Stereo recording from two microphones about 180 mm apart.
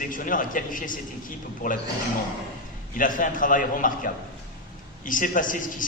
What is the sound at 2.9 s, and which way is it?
A man's voice, 45° left (ahead or behind).